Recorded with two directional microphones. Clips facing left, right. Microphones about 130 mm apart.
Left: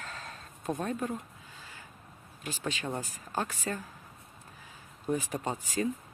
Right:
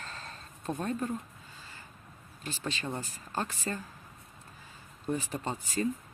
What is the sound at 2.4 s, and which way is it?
Speech, 10° left (ahead or behind).